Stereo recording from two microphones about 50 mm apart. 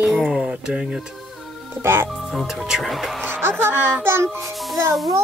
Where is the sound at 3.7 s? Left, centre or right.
Right.